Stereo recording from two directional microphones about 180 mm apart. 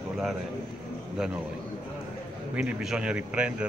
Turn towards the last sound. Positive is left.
turn(degrees=-5)  # may be behind; listen again after turning